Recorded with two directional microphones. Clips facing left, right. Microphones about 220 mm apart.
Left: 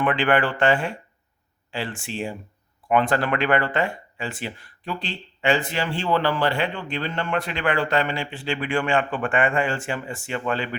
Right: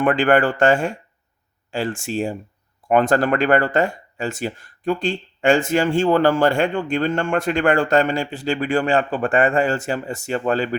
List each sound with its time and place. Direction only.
0.0 s speech: 45° right (ahead or behind)